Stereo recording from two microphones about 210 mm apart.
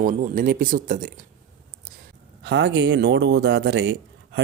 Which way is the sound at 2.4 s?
55° right (ahead or behind).